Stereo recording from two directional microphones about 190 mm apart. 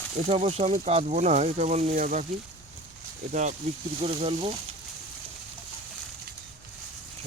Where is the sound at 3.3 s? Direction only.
40° right (ahead or behind).